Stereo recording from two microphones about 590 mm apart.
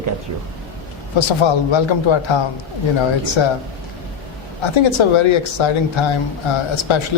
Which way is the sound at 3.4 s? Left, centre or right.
Left.